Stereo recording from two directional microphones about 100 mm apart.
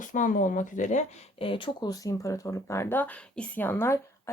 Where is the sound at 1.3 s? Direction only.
65° left (ahead or behind).